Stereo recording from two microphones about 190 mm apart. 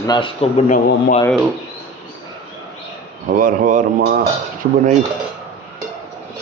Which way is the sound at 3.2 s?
45° right (ahead or behind).